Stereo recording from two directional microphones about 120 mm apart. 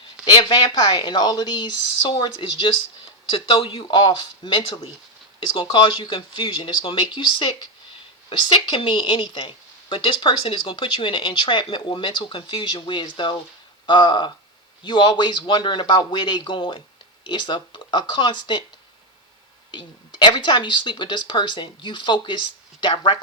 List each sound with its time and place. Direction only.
0.3 s a woman's voice: 35° left (ahead or behind)
19.7 s speech: 40° left (ahead or behind)